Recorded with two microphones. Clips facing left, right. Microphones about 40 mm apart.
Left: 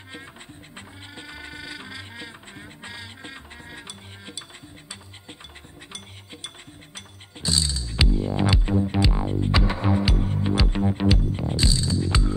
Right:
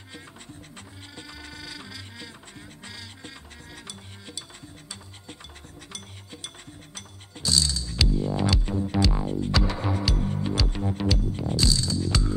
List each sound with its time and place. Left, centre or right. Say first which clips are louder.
0.7 s music: left 6 dB; left
7.0 s music: left 1 dB; left